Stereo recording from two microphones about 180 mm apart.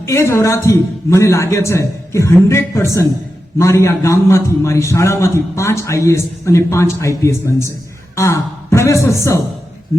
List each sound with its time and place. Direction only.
0.0 s a man's voice: 15° left (ahead or behind)